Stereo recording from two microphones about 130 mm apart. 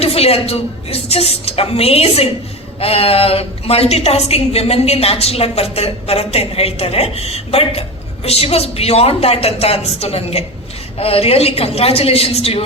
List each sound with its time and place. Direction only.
0.0 s a woman's voice: 50° left (ahead or behind)